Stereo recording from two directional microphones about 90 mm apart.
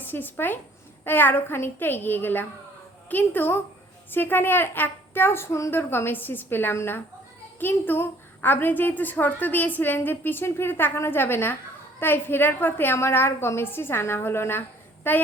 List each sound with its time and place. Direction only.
0.0 s a woman's voice: 20° left (ahead or behind)